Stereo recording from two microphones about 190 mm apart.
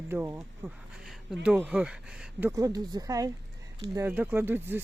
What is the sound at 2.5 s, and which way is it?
Speech, 20° right (ahead or behind).